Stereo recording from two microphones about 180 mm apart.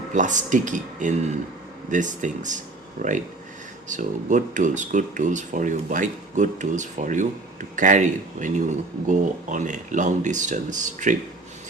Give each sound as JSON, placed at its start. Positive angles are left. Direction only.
{"t": 0.1, "sound": "speech", "side_deg": -45}